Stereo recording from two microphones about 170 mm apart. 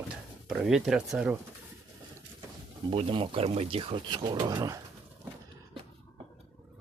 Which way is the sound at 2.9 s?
30° right (ahead or behind).